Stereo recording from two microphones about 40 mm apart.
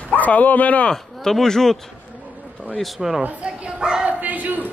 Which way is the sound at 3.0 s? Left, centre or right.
Centre.